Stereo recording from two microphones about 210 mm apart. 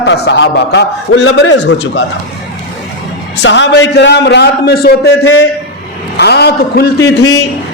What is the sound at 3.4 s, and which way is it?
A man's voice, 55° left (ahead or behind).